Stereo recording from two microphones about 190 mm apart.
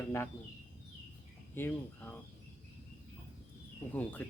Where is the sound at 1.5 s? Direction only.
10° left (ahead or behind).